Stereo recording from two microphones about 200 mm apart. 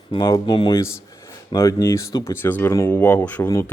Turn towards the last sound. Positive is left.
turn(degrees=15)  # may be behind; listen again after turning